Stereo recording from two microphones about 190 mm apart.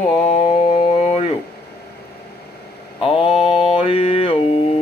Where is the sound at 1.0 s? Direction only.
35° left (ahead or behind).